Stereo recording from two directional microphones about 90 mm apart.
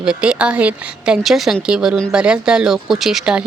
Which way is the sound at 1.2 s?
Centre (ahead or behind).